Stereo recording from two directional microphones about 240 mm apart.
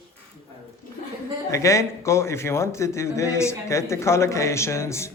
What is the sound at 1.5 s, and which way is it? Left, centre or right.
A man's voice, centre.